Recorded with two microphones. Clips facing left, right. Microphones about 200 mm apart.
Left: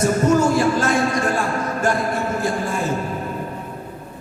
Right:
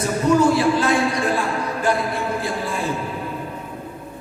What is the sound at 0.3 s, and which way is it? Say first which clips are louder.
A man's voice: right 1 dB; 45° left (ahead or behind).